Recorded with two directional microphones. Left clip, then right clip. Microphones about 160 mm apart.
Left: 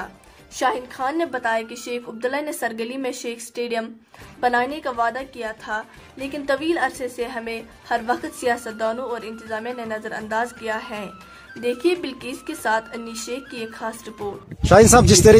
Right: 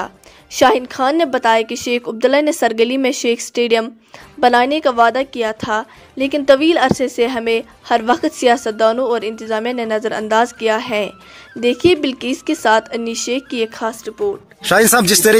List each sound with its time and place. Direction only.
0.0 s a woman's voice: 55° right (ahead or behind)
14.6 s speech: centre (ahead or behind)